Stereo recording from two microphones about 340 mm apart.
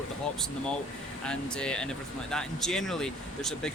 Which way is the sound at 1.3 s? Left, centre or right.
Centre.